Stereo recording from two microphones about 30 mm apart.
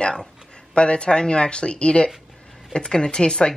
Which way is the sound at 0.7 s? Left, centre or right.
Left.